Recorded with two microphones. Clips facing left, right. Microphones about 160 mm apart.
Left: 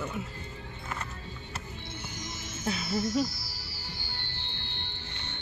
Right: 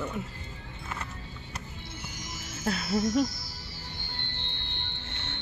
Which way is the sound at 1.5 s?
25° left (ahead or behind).